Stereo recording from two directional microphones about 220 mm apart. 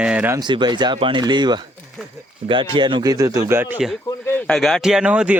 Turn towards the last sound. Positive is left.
turn(degrees=-5)  # may be behind; listen again after turning